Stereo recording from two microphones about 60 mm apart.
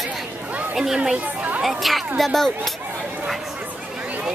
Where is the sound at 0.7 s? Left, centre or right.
Centre.